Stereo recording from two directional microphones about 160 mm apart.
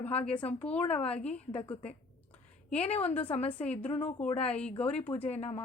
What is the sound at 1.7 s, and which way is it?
Speech, 40° left (ahead or behind).